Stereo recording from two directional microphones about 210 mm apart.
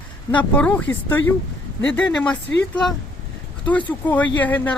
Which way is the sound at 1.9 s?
5° left (ahead or behind).